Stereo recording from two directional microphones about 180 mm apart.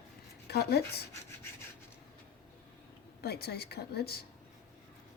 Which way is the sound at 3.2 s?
60° left (ahead or behind).